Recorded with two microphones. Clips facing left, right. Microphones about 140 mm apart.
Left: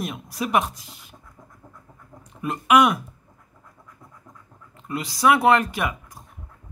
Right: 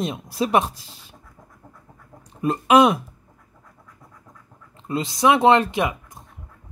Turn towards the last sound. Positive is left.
turn(degrees=-20)  # may be behind; listen again after turning